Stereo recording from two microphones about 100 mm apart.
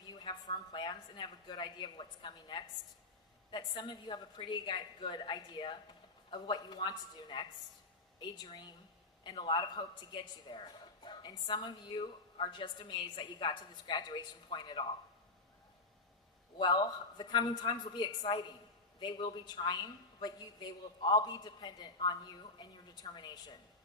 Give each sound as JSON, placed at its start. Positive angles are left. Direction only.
{"t": 0.0, "sound": "a woman's voice", "side_deg": 45}
{"t": 16.6, "sound": "a woman's voice", "side_deg": 50}